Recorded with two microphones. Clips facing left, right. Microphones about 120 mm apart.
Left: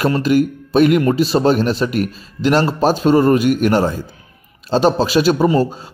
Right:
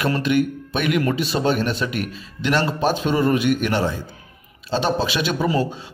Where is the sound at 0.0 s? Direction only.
35° left (ahead or behind).